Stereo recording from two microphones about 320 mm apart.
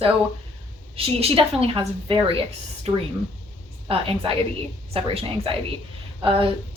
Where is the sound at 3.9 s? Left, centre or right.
Centre.